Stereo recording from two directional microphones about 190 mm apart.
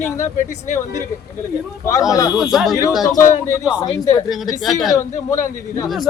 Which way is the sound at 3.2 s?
15° left (ahead or behind).